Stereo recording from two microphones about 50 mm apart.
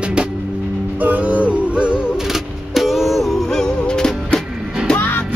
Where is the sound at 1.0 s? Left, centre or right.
Right.